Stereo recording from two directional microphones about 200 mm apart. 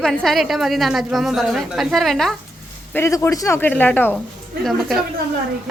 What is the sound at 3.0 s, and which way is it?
A woman's voice, 15° left (ahead or behind).